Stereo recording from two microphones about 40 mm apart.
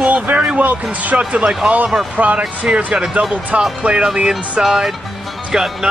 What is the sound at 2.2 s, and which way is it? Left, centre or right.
Speech, right.